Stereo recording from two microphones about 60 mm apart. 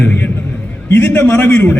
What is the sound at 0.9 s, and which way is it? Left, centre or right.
Speech, left.